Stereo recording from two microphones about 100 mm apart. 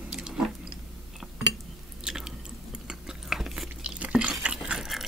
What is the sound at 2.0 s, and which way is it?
Biting, 5° right (ahead or behind).